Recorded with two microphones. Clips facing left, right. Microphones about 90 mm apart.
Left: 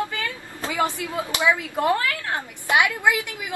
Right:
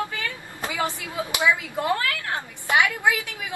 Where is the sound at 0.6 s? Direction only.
20° right (ahead or behind).